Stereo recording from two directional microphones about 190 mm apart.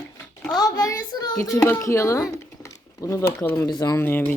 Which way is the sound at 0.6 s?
20° left (ahead or behind).